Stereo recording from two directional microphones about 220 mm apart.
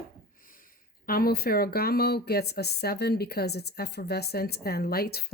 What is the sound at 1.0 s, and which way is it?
Speech, 40° left (ahead or behind).